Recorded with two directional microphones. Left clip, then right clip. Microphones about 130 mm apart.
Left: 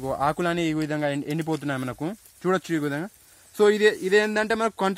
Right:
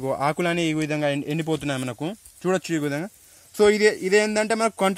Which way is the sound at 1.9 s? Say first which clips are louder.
Right 1 dB; 5° right (ahead or behind).